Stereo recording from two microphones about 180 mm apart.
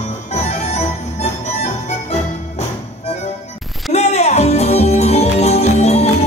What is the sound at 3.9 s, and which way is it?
Music, 40° left (ahead or behind).